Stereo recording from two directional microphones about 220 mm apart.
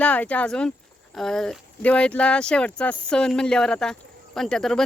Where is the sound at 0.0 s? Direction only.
5° left (ahead or behind).